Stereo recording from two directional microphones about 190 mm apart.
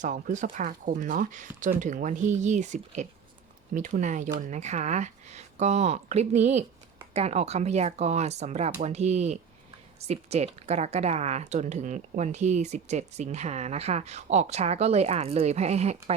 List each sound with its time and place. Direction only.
0.0 s speech: 40° right (ahead or behind)